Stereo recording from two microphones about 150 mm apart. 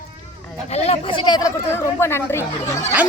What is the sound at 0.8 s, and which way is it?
Speech, 30° left (ahead or behind).